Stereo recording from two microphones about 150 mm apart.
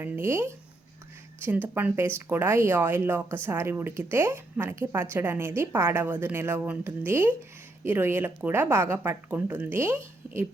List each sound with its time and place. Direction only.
0.0 s speech: 15° right (ahead or behind)